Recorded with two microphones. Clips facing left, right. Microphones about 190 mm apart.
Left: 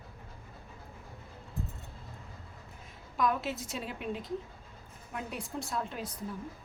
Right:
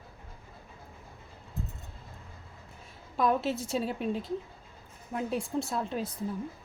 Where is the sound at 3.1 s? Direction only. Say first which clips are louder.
Right 4 dB; 30° right (ahead or behind).